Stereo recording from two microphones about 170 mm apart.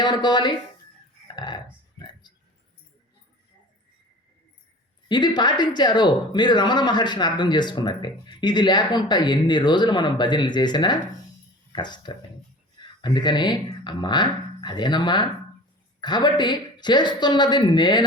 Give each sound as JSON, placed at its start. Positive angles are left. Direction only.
{"t": 0.0, "sound": "speech", "side_deg": 25}
{"t": 1.4, "sound": "a sound", "side_deg": 25}
{"t": 5.0, "sound": "speech", "side_deg": 25}